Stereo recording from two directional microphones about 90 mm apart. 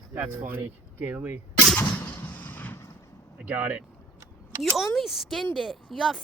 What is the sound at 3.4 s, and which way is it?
Speech, 15° right (ahead or behind).